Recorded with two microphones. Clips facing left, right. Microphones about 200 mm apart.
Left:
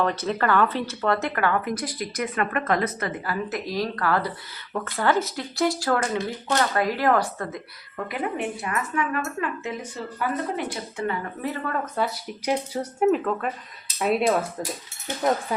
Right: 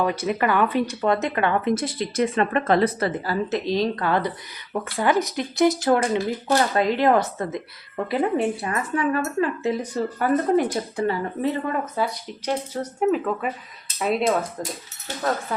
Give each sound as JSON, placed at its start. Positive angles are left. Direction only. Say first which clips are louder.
{"t": 0.0, "sound": "speech", "louder": "right 2 dB", "side_deg": -10}
{"t": 12.0, "sound": "speech", "louder": "even", "side_deg": 0}
{"t": 12.5, "sound": "speech", "louder": "even", "side_deg": 10}
{"t": 13.1, "sound": "speech", "louder": "even", "side_deg": 0}
{"t": 15.0, "sound": "speech", "louder": "left 2 dB", "side_deg": 20}